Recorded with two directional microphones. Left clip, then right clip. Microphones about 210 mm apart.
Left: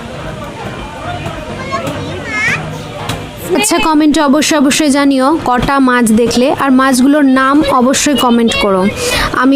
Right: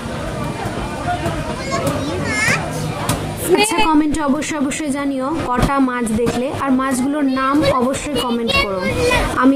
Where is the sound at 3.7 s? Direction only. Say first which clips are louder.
Left 5 dB; 40° left (ahead or behind).